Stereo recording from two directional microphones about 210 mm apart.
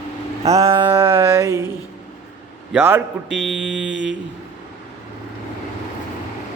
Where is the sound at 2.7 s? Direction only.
10° right (ahead or behind).